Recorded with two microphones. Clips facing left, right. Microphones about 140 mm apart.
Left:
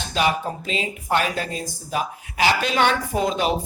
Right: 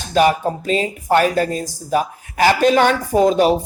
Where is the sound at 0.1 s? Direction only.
45° right (ahead or behind).